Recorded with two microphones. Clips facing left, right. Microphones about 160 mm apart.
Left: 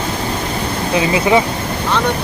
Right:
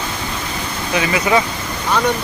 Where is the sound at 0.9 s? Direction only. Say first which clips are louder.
Left 3 dB; 25° left (ahead or behind).